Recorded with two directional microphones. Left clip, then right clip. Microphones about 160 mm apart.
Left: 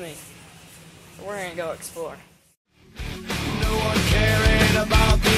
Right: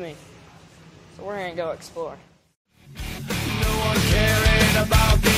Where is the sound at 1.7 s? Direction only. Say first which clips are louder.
Right 1 dB; 10° right (ahead or behind).